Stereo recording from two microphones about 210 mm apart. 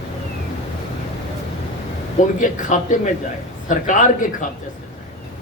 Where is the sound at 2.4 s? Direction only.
35° left (ahead or behind).